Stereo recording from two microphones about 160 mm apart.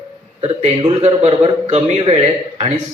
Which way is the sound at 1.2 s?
40° right (ahead or behind).